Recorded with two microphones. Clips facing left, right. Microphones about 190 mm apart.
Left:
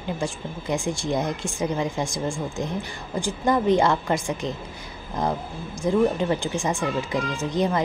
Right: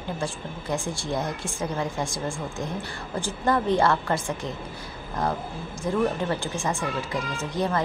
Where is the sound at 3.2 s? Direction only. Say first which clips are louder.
Left 3 dB; 15° left (ahead or behind).